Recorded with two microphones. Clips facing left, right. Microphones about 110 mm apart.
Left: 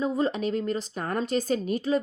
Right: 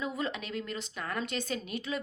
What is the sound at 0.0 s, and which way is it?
A woman's voice, 35° left (ahead or behind).